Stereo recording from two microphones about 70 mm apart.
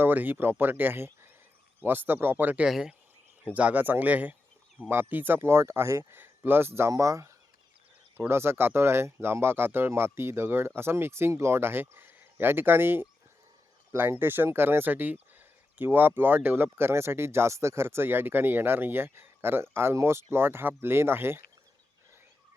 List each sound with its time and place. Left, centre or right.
0.0 s speech: right
2.6 s speech: centre
3.4 s speech: right
6.9 s speech: right
8.3 s speech: right